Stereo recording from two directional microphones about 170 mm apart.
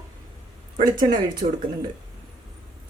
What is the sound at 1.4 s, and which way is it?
Speech, 40° right (ahead or behind).